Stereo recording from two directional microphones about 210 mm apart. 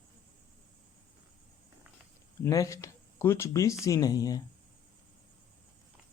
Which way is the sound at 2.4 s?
15° left (ahead or behind).